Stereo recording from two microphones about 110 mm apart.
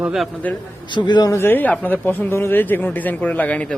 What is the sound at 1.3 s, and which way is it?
Speech, 20° left (ahead or behind).